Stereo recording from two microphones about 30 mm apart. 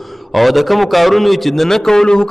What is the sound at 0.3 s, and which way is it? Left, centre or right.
A man's voice, centre.